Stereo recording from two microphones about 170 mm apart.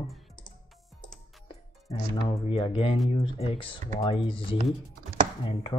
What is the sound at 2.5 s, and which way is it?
Speech, 35° left (ahead or behind).